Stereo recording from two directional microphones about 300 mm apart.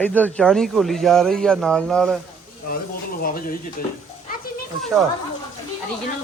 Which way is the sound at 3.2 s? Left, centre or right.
Left.